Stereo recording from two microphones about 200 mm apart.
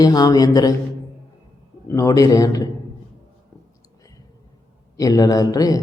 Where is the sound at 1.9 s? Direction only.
15° left (ahead or behind).